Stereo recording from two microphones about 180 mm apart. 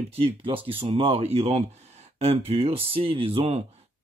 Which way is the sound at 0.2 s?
30° right (ahead or behind).